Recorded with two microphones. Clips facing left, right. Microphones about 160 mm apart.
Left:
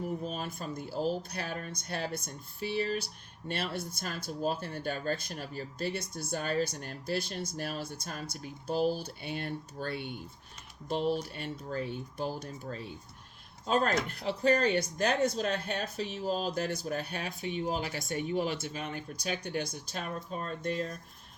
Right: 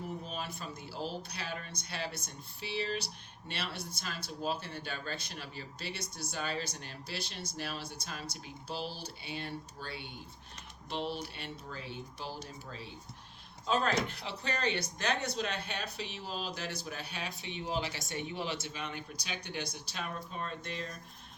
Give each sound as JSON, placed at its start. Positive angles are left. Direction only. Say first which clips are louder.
{"t": 0.3, "sound": "speech", "louder": "left 4 dB", "side_deg": 45}